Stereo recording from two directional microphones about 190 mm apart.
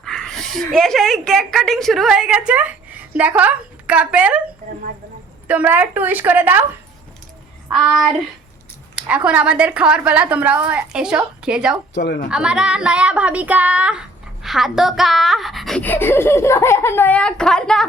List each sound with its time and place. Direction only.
0.0 s a woman's voice: 5° left (ahead or behind)
5.5 s speech: 10° right (ahead or behind)
7.7 s speech: centre (ahead or behind)
11.9 s a woman's voice: 60° left (ahead or behind)
12.3 s speech: 5° right (ahead or behind)